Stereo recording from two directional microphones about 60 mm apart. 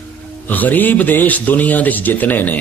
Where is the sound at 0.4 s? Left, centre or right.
Left.